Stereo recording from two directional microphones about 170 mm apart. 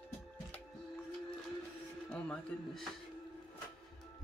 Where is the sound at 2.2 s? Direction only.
5° left (ahead or behind).